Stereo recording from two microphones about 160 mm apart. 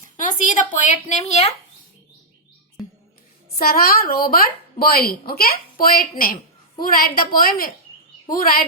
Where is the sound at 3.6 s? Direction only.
70° left (ahead or behind).